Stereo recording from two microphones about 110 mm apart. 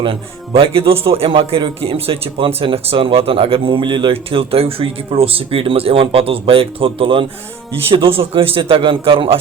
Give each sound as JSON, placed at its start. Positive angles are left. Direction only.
{"t": 0.0, "sound": "speech", "side_deg": -55}